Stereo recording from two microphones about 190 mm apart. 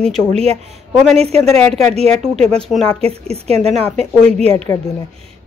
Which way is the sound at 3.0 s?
30° right (ahead or behind).